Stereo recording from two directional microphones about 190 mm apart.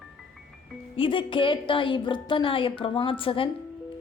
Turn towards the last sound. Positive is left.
turn(degrees=30)  # may be behind; listen again after turning